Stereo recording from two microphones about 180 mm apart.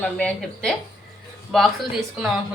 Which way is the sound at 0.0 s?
5° left (ahead or behind).